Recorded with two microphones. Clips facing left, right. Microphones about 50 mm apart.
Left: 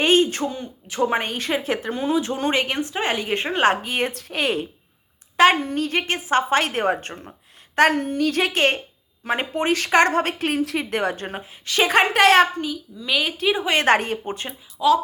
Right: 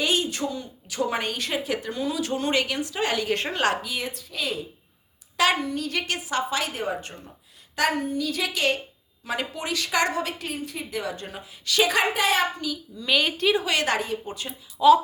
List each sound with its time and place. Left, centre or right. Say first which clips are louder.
0.0 s a woman's voice: left 7 dB; left
3.9 s a woman's voice: left 7 dB; left
5.4 s a woman's voice: left 6 dB; left
6.0 s a woman's voice: left 8 dB; left
6.5 s a woman's voice: left 7 dB; left
7.8 s a woman's voice: left 6 dB; left
10.4 s a woman's voice: left 10 dB; left
12.1 s a woman's voice: left 8 dB; left
13.0 s a woman's voice: even; centre
13.7 s a woman's voice: left 6 dB; left
14.8 s a woman's voice: right 2 dB; centre